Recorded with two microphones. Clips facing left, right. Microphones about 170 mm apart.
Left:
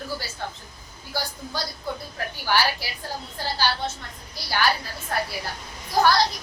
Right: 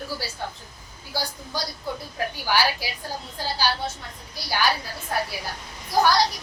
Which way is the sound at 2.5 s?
15° right (ahead or behind).